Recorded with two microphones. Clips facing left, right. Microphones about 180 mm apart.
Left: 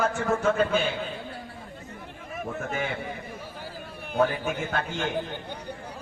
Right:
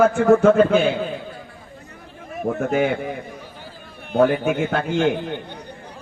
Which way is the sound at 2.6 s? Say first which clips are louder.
Right 12 dB; 50° right (ahead or behind).